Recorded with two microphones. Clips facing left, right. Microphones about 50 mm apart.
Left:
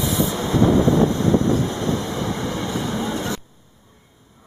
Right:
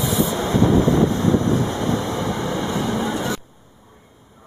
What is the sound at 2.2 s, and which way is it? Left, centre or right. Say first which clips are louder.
Vehicle: right 2 dB; right.